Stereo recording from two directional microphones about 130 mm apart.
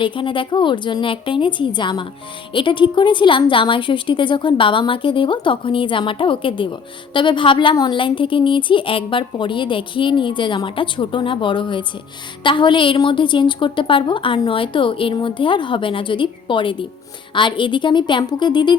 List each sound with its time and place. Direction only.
0.0 s a woman's voice: 40° left (ahead or behind)